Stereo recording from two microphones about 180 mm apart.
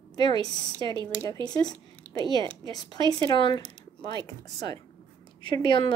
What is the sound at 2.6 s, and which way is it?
Speech, 25° right (ahead or behind).